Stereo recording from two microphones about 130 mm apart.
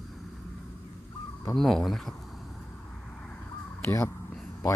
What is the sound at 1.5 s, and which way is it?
Speech, centre (ahead or behind).